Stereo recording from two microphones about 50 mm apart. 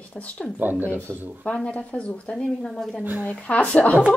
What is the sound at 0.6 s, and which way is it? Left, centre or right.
Speech, right.